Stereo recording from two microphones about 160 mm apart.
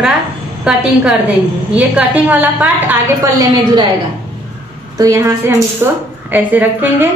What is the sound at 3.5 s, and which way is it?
Speech, 25° right (ahead or behind).